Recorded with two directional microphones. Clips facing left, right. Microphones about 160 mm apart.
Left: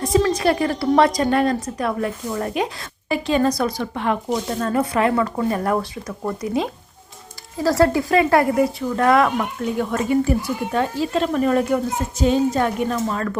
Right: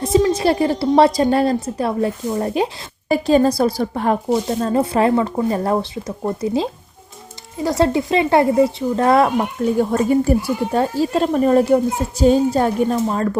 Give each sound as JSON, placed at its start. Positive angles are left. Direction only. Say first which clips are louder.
{"t": 0.0, "sound": "a woman's voice", "louder": "right 2 dB", "side_deg": -25}
{"t": 4.3, "sound": "a woman's voice", "louder": "right 4 dB", "side_deg": -25}